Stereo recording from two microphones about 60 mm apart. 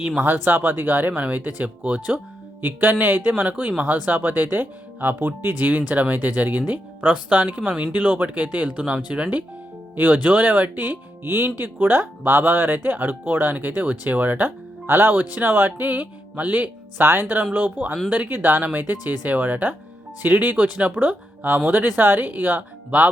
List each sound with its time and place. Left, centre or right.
0.2 s speech: right
3.5 s speech: right
7.7 s speech: centre
7.9 s speech: right